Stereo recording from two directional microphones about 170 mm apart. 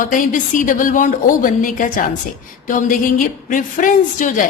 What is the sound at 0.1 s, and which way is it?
A woman's voice, 50° left (ahead or behind).